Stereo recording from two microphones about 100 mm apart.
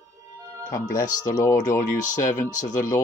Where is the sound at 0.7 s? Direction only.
35° left (ahead or behind).